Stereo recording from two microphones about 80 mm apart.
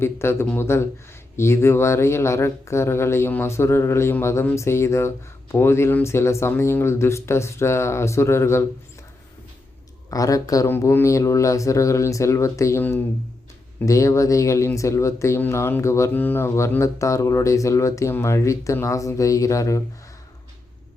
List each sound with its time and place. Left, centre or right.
0.0 s speech: left
10.1 s speech: left
10.7 s speech: left
13.8 s speech: left
16.1 s speech: left